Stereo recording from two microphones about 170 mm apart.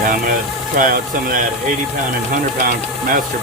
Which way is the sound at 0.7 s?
55° right (ahead or behind).